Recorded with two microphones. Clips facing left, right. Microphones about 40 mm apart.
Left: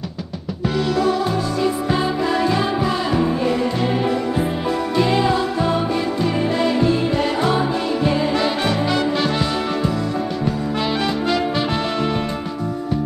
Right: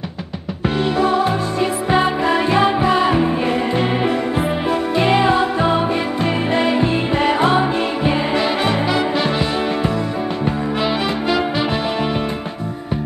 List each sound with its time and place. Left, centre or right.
0.7 s music: right
10.8 s music: centre